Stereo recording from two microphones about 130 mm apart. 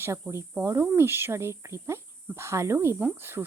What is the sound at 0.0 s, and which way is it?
A woman's voice, 20° right (ahead or behind).